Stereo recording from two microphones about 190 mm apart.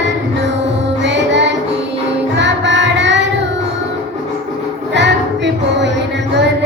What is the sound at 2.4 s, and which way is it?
Child singing, 70° right (ahead or behind).